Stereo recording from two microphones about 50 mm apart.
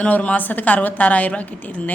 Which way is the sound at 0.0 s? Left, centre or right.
Left.